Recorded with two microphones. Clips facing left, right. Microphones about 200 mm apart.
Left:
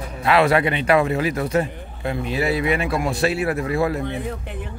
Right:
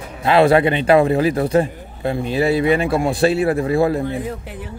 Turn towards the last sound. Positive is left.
turn(degrees=-30)  # may be behind; listen again after turning